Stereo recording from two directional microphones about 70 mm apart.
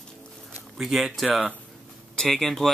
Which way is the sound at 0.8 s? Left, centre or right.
Centre.